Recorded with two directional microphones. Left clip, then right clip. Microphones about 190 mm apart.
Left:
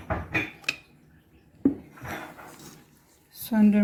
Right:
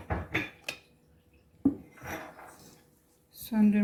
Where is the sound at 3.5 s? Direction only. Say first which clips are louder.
Left 5 dB; 30° left (ahead or behind).